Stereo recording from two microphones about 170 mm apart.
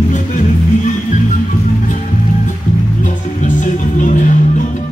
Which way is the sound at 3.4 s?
45° left (ahead or behind).